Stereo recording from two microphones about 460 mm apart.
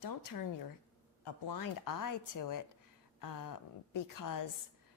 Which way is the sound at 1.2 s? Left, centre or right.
Left.